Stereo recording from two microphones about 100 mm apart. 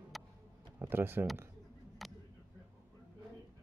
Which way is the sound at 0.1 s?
Centre (ahead or behind).